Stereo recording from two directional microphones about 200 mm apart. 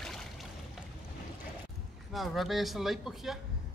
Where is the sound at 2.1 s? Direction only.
Centre (ahead or behind).